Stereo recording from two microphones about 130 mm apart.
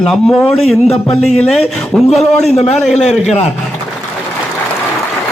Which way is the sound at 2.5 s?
60° left (ahead or behind).